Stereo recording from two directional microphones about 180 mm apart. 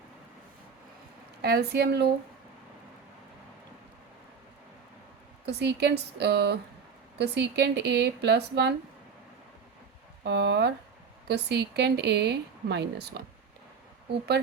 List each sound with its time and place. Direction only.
1.4 s speech: 65° right (ahead or behind)
5.5 s speech: 70° right (ahead or behind)
10.2 s speech: 75° right (ahead or behind)